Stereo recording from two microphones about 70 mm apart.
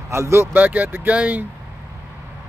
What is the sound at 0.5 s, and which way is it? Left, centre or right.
Speech, right.